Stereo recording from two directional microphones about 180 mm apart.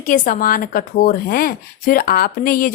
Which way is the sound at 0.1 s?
50° left (ahead or behind).